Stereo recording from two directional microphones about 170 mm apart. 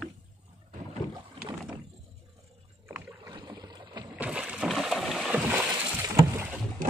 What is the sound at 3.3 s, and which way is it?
Boat, 25° right (ahead or behind).